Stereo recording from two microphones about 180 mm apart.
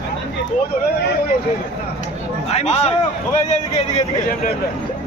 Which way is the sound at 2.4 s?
35° left (ahead or behind).